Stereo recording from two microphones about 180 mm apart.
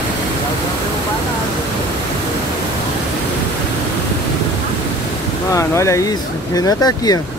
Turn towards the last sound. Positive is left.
turn(degrees=20)  # may be behind; listen again after turning